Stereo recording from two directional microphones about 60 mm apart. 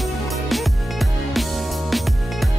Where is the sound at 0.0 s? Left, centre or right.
Centre.